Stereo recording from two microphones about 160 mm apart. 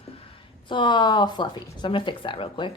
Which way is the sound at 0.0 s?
35° left (ahead or behind).